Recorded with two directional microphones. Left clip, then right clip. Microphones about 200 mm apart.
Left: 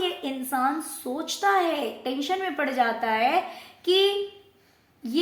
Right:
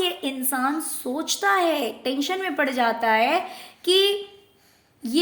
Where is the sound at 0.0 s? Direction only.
60° right (ahead or behind).